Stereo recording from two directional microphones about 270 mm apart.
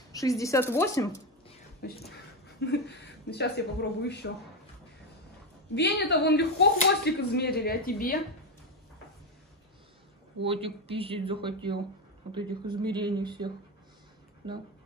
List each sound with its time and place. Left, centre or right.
0.1 s a woman's voice: centre
2.6 s speech: left
5.8 s speech: left
10.4 s speech: right